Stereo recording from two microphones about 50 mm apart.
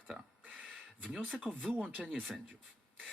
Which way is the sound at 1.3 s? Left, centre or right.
Centre.